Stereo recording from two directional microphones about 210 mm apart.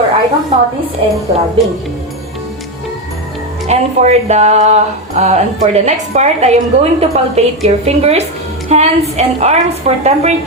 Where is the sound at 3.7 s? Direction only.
30° right (ahead or behind).